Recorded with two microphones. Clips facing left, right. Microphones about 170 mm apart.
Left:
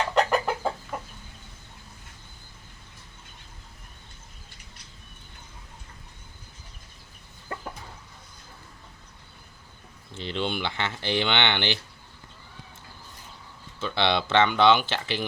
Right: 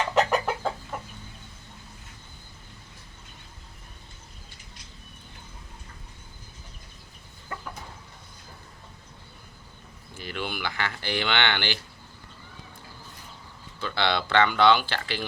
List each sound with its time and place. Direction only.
0.1 s chicken: 5° right (ahead or behind)
10.2 s speech: 25° left (ahead or behind)
13.7 s speech: 20° left (ahead or behind)